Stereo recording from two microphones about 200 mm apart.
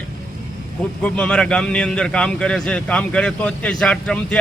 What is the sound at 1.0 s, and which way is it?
A man's voice, 5° left (ahead or behind).